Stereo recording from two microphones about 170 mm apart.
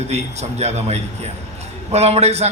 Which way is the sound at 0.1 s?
40° right (ahead or behind).